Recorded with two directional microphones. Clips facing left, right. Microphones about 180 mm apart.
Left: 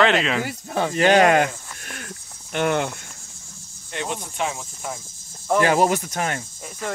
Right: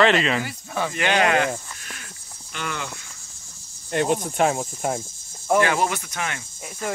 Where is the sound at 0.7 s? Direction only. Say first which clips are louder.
Left 3 dB; 25° left (ahead or behind).